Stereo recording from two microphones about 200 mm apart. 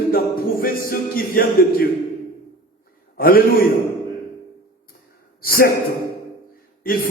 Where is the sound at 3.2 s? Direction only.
45° left (ahead or behind).